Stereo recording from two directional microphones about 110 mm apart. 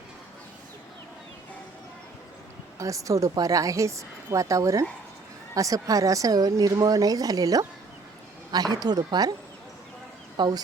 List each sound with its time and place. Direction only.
2.7 s a woman's voice: 30° right (ahead or behind)
10.3 s speech: 40° right (ahead or behind)